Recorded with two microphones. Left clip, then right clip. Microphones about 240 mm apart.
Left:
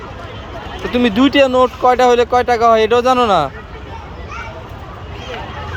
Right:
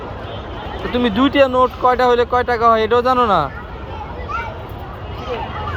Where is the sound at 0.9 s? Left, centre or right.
Left.